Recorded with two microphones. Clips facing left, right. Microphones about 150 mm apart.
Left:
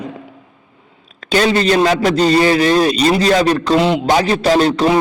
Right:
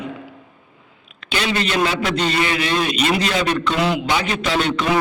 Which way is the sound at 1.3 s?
40° left (ahead or behind).